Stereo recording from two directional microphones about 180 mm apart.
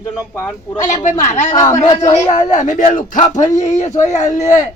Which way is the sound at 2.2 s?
40° left (ahead or behind).